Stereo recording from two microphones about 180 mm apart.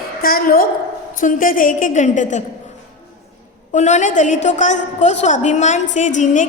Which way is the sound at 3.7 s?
40° left (ahead or behind).